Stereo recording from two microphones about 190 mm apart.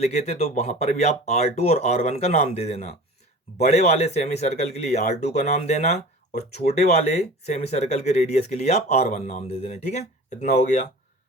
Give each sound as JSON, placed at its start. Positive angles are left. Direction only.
{"t": 0.0, "sound": "speech", "side_deg": 35}